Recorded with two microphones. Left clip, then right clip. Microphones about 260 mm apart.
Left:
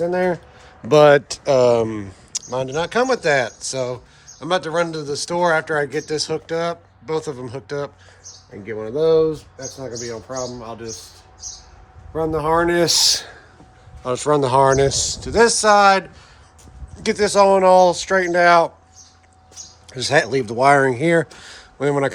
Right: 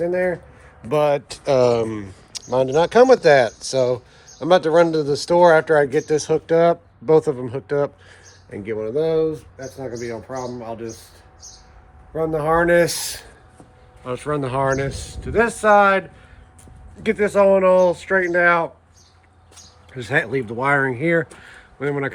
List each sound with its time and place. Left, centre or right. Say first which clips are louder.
0.1 s speech: left 1 dB; centre
0.9 s speech: left 7 dB; left
1.3 s speech: left 2 dB; centre
6.6 s speech: right 8 dB; centre
9.0 s speech: left 4 dB; centre
12.1 s speech: even; centre
12.8 s speech: left 5 dB; left
14.0 s speech: left 6 dB; centre
19.9 s speech: left 4 dB; centre